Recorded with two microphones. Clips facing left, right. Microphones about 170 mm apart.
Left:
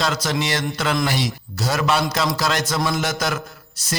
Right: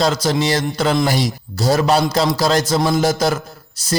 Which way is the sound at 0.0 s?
35° right (ahead or behind).